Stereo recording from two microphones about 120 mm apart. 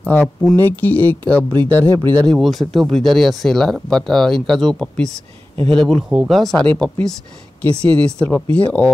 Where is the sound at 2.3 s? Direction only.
Centre (ahead or behind).